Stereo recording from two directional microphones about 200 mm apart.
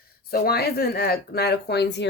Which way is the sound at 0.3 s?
50° left (ahead or behind).